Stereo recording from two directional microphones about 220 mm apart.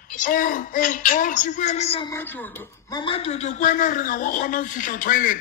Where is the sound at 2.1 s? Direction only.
10° left (ahead or behind).